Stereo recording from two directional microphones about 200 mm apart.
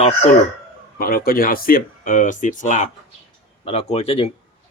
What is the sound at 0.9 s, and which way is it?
Speech, 45° left (ahead or behind).